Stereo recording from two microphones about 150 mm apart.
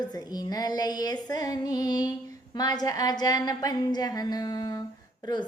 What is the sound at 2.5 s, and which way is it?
A woman's voice, 25° left (ahead or behind).